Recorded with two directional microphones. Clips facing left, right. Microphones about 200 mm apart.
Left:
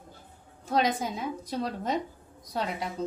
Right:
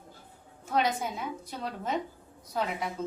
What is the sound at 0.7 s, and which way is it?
Speech, 35° left (ahead or behind).